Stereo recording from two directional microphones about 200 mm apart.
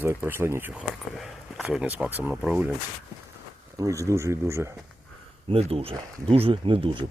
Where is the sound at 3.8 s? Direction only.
15° right (ahead or behind).